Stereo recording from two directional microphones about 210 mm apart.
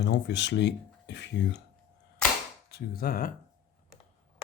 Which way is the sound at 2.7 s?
45° left (ahead or behind).